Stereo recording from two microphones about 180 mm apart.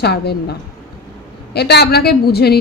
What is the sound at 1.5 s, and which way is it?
A woman's voice, 65° left (ahead or behind).